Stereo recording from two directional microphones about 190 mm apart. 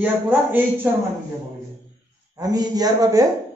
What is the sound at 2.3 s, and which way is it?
Speech, 20° right (ahead or behind).